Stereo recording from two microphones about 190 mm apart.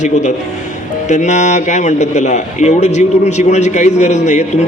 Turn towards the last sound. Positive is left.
turn(degrees=35)  # may be behind; listen again after turning